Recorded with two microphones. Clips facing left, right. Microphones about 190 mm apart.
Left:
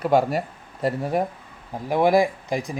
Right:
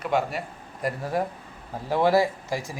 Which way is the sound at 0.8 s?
20° left (ahead or behind).